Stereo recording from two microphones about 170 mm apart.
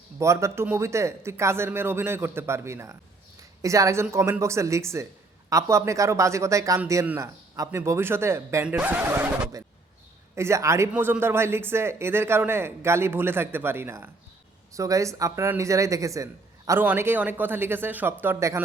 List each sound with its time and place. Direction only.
0.2 s speech: 15° right (ahead or behind)